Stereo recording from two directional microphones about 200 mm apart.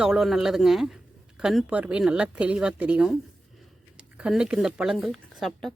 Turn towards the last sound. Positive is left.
turn(degrees=0)  # may be behind; listen again after turning